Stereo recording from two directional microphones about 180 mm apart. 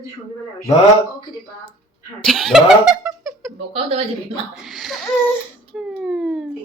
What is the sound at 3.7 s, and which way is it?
Speech, 30° right (ahead or behind).